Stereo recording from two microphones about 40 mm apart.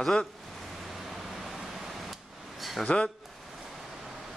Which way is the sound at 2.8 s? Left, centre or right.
Left.